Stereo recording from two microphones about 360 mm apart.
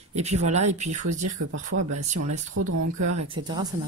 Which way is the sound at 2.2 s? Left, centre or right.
Right.